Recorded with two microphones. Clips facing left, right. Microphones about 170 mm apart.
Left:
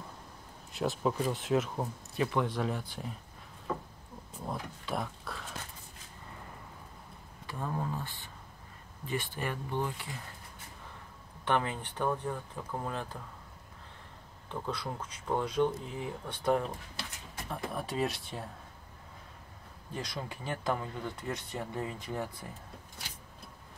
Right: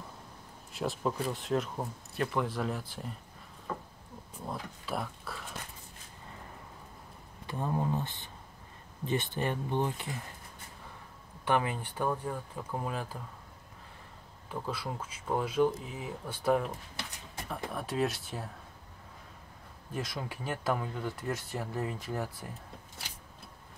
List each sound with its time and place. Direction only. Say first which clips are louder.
0.7 s speech: left 2 dB; centre (ahead or behind)
4.5 s speech: left 1 dB; centre (ahead or behind)
7.4 s speech: right 4 dB; 20° right (ahead or behind)
11.4 s speech: right 1 dB; 10° right (ahead or behind)
14.5 s speech: even; 5° right (ahead or behind)
19.9 s speech: right 2 dB; 5° right (ahead or behind)